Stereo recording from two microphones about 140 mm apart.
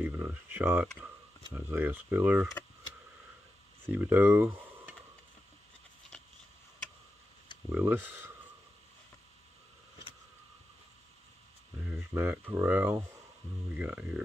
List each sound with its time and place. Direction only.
0.0 s speech: 15° right (ahead or behind)
3.9 s speech: 15° right (ahead or behind)
7.7 s speech: 15° right (ahead or behind)
12.1 s speech: 15° right (ahead or behind)